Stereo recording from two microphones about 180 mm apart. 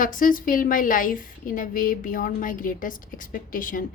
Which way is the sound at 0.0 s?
50° left (ahead or behind).